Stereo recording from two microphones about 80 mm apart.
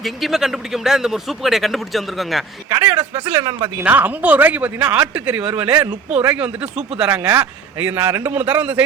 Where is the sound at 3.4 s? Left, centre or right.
Right.